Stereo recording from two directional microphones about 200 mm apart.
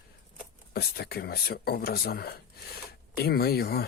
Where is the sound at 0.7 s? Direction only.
50° left (ahead or behind).